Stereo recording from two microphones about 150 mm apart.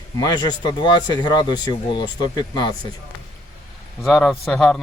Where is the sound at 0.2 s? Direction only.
30° left (ahead or behind).